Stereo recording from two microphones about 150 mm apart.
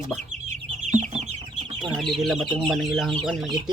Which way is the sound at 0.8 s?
55° right (ahead or behind).